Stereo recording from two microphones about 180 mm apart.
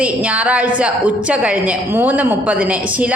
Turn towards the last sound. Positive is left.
turn(degrees=-10)  # may be behind; listen again after turning